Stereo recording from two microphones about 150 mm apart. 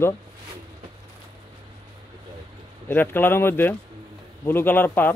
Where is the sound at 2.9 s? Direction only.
15° left (ahead or behind).